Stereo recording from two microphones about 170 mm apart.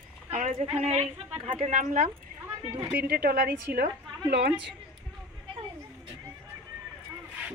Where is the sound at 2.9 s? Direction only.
60° right (ahead or behind).